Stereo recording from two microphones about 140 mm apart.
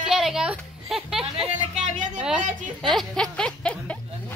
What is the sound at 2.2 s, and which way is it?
Speech, 5° right (ahead or behind).